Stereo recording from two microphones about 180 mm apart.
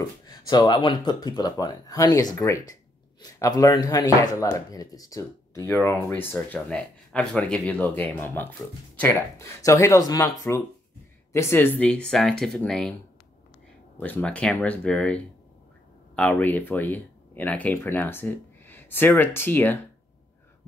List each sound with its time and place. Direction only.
0.0 s speech: 20° left (ahead or behind); by 12.9 s 5° left (ahead or behind)
13.9 s speech: 10° left (ahead or behind)